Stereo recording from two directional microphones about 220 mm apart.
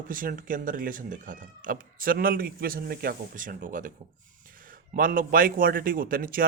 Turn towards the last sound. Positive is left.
turn(degrees=-40)  # may be behind; listen again after turning